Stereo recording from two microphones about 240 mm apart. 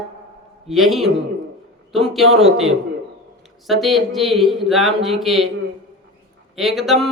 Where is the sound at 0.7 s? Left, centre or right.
Centre.